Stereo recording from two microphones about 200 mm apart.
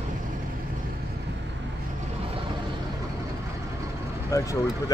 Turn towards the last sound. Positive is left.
turn(degrees=15)  # may be behind; listen again after turning